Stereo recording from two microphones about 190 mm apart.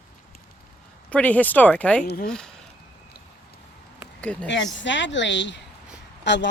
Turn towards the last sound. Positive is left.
turn(degrees=70)  # may be behind; listen again after turning